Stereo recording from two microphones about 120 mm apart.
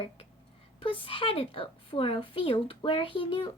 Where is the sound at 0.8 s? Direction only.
50° left (ahead or behind).